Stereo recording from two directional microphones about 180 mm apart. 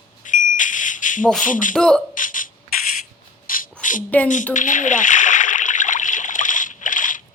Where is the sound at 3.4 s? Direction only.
50° left (ahead or behind).